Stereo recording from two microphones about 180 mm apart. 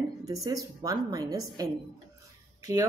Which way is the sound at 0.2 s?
20° right (ahead or behind).